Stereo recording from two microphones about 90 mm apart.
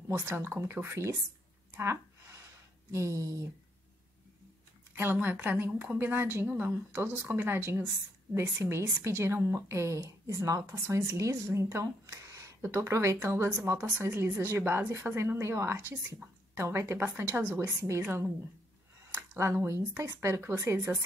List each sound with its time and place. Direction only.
0.1 s a woman's voice: 25° right (ahead or behind)
1.8 s a sound: 30° right (ahead or behind)
2.9 s a woman's voice: 35° right (ahead or behind)
4.9 s a woman's voice: 25° right (ahead or behind)
17.6 s a woman's voice: 35° right (ahead or behind)
19.3 s a woman's voice: 30° right (ahead or behind)